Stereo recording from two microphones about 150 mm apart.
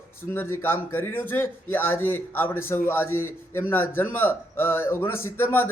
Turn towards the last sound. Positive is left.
turn(degrees=15)  # may be behind; listen again after turning